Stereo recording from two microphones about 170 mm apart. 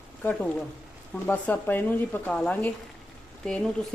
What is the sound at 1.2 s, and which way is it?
Speech, 10° left (ahead or behind).